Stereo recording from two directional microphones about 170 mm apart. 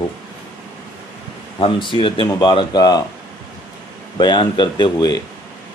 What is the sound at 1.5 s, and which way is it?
A man's voice, 30° left (ahead or behind).